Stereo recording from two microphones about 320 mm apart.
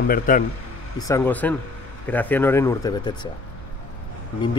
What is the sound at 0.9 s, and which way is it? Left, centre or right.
Speech, centre.